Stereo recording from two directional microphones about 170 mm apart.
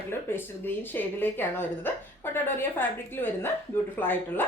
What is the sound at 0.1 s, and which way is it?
A woman's voice, 15° left (ahead or behind).